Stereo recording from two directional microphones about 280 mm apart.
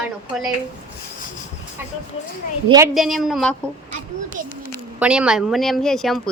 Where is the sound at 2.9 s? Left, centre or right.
Centre.